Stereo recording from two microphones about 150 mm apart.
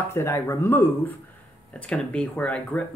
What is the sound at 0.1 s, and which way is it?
Speech, 15° left (ahead or behind).